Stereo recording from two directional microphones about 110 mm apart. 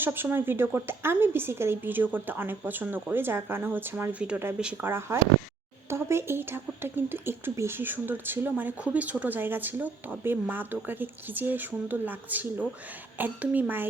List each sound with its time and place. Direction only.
0.0 s a woman's voice: 20° right (ahead or behind)
4.8 s a woman's voice: 20° right (ahead or behind)